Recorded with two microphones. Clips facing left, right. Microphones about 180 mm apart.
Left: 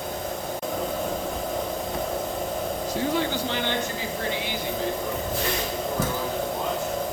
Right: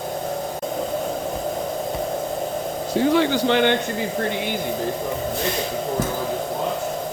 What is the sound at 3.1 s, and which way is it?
Speech, 80° right.